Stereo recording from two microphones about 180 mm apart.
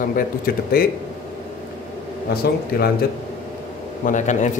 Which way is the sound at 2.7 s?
55° left (ahead or behind).